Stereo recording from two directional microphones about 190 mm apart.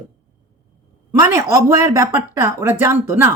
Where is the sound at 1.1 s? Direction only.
15° right (ahead or behind).